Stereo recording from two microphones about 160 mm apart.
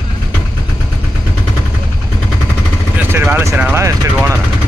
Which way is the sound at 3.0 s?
10° right (ahead or behind).